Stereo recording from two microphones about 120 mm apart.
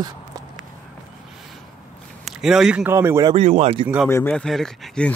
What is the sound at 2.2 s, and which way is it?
Speech, 5° right (ahead or behind).